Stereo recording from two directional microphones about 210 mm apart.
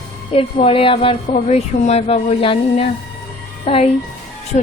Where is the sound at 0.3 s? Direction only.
25° left (ahead or behind).